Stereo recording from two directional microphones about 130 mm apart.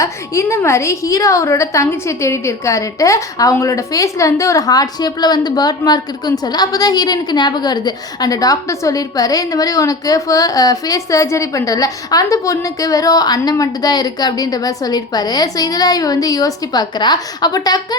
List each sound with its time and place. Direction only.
0.0 s a woman's voice: 25° left (ahead or behind)